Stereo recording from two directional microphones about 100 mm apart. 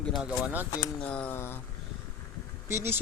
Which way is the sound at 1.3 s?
25° left (ahead or behind).